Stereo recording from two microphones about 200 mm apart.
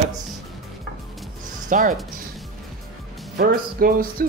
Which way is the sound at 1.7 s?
45° right (ahead or behind).